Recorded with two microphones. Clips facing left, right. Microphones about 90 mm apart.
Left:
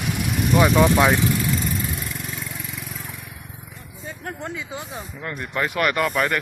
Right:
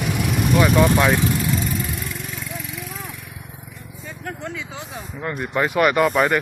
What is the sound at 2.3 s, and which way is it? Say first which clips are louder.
Vehicle: right 2 dB; centre (ahead or behind).